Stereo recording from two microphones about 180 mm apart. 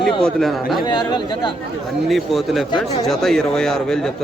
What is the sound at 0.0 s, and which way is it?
Speech, 5° left (ahead or behind).